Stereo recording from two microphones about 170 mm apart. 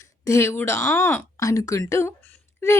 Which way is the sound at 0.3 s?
15° left (ahead or behind).